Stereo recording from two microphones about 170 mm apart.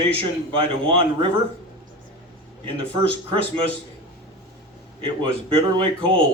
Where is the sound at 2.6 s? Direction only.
30° right (ahead or behind).